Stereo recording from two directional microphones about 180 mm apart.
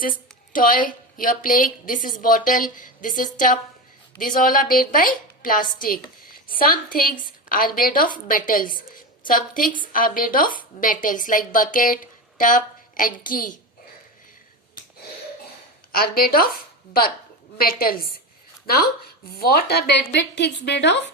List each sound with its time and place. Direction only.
0.0 s a woman's voice: 50° left (ahead or behind)
15.9 s a woman's voice: 55° left (ahead or behind)
17.6 s a woman's voice: 55° left (ahead or behind); by 21.0 s 70° left (ahead or behind)